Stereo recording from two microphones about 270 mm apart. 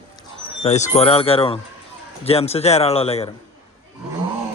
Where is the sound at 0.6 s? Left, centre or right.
Left.